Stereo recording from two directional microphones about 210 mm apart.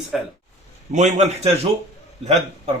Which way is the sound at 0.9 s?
35° right (ahead or behind).